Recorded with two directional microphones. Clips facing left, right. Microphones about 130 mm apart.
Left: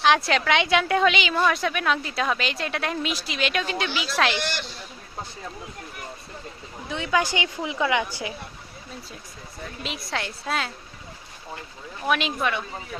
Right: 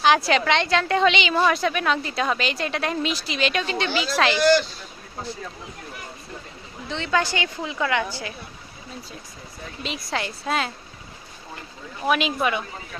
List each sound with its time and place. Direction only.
0.0 s a woman's voice: centre (ahead or behind)
6.9 s a woman's voice: 10° left (ahead or behind)
9.8 s a woman's voice: centre (ahead or behind)
12.0 s a woman's voice: 5° right (ahead or behind)